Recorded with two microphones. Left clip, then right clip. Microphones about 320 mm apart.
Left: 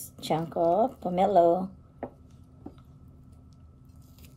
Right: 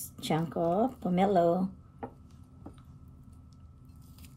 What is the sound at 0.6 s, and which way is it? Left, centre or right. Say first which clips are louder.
Speech: left 6 dB; right.